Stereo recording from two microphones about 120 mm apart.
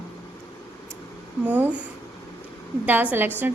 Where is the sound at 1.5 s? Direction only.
15° right (ahead or behind).